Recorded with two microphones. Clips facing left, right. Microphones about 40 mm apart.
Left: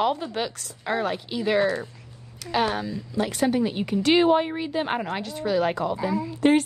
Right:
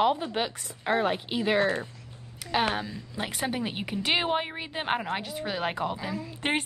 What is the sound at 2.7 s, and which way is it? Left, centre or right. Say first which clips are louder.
A woman's voice: left 5 dB; centre.